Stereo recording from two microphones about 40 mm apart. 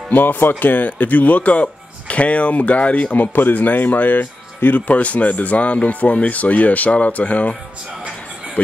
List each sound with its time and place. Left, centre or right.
0.1 s speech: left
3.2 s speech: left
4.7 s speech: left